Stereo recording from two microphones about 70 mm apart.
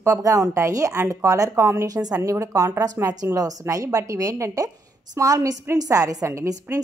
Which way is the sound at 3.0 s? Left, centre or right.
Right.